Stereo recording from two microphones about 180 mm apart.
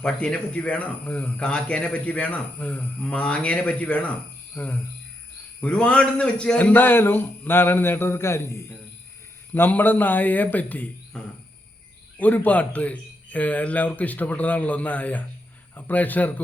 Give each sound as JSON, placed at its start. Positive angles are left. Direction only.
{"t": 0.0, "sound": "a man's voice", "side_deg": 5}
{"t": 12.2, "sound": "a man's voice", "side_deg": 10}